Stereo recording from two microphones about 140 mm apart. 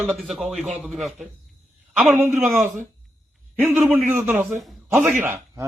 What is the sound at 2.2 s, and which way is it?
Speech, 15° right (ahead or behind).